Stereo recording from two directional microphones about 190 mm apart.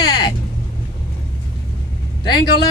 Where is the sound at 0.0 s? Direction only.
20° left (ahead or behind).